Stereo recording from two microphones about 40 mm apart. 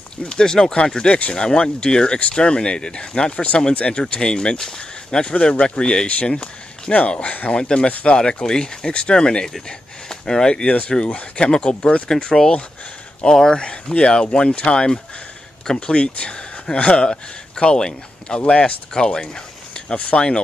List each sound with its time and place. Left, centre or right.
0.3 s speech: centre
10.5 s a man's voice: left